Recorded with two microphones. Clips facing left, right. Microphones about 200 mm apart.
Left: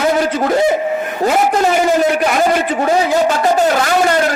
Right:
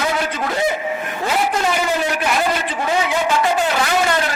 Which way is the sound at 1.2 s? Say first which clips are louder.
Left 6 dB; 45° left (ahead or behind).